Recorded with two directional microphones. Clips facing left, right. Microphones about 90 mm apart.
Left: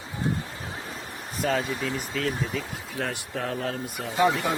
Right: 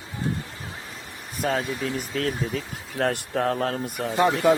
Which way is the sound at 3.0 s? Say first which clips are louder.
Right 8 dB; 55° right (ahead or behind).